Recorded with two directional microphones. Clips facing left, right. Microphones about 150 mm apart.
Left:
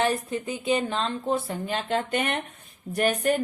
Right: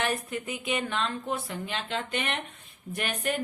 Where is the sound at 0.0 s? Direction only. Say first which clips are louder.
Left 5 dB; 30° left (ahead or behind).